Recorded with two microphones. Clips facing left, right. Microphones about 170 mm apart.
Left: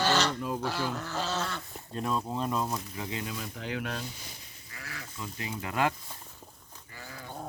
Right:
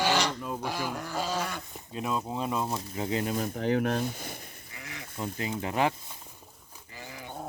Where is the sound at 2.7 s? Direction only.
30° right (ahead or behind); by 4.4 s 55° right (ahead or behind).